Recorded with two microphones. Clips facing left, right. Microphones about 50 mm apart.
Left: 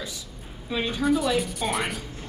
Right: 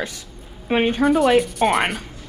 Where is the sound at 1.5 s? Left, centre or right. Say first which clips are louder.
Right 9 dB; right.